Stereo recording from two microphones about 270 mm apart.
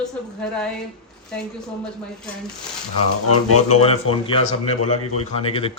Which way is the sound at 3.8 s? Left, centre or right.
Left.